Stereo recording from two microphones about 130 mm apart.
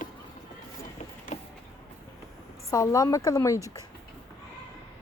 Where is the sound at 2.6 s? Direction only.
25° left (ahead or behind).